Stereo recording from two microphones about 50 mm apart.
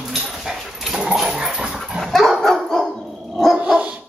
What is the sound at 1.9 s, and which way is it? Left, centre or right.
Dog, centre.